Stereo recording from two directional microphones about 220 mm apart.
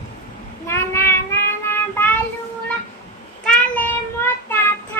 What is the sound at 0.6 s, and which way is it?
Child singing, 10° left (ahead or behind).